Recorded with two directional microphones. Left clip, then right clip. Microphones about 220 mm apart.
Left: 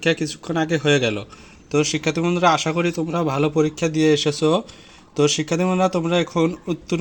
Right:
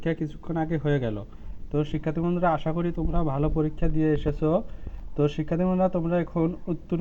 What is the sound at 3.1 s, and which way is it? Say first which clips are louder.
Speech: left 7 dB; 15° left (ahead or behind).